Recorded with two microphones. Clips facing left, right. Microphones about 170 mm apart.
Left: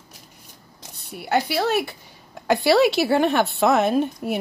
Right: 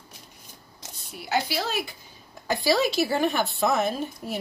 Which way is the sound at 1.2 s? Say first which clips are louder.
Left 5 dB; 60° left (ahead or behind).